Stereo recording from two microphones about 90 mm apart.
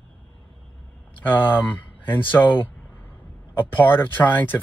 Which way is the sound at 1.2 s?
20° left (ahead or behind).